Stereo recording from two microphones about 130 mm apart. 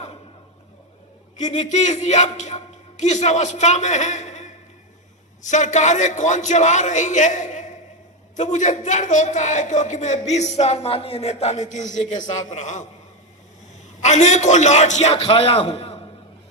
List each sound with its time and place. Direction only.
1.4 s a man's voice: 65° left (ahead or behind)
14.0 s a man's voice: 65° left (ahead or behind)
15.1 s a man's voice: 45° left (ahead or behind)